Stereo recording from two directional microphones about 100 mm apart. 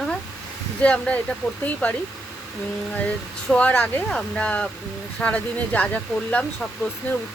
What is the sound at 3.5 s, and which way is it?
Speech, 15° left (ahead or behind).